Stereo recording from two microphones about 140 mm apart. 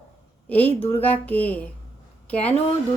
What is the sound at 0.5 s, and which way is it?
Speech, 10° left (ahead or behind).